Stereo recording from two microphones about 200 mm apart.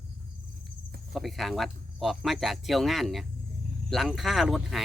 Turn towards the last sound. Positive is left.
turn(degrees=0)  # may be behind; listen again after turning